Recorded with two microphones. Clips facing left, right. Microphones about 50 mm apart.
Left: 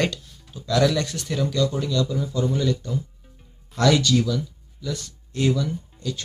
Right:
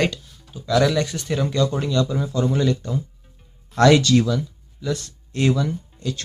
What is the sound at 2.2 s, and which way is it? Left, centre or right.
Speech, right.